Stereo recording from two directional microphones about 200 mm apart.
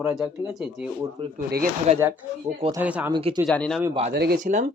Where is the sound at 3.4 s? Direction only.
5° left (ahead or behind).